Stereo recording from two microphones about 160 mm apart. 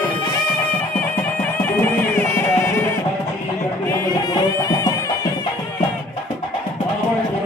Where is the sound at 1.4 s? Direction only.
15° left (ahead or behind).